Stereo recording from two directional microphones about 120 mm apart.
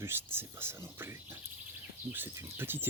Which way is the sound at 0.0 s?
20° right (ahead or behind).